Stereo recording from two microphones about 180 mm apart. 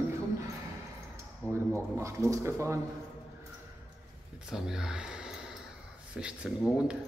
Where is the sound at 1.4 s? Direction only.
15° right (ahead or behind).